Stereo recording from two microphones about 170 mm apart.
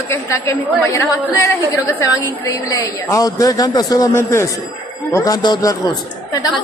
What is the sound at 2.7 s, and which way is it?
Speech, 20° left (ahead or behind).